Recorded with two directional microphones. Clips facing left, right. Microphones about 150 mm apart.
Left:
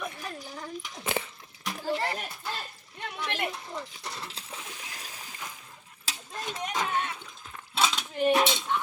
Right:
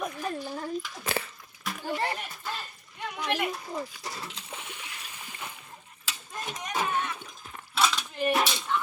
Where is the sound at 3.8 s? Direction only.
10° right (ahead or behind).